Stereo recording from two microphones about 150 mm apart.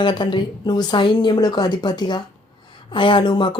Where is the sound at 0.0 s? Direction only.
30° left (ahead or behind).